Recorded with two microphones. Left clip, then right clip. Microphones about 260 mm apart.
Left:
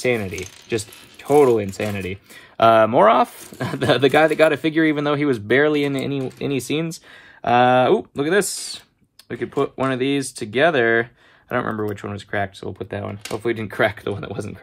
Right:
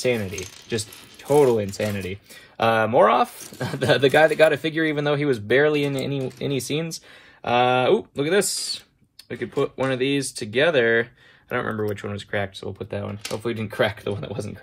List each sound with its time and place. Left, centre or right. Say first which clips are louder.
0.0 s speech: left 2 dB; left
7.4 s speech: left 4 dB; left
12.6 s speech: left 2 dB; left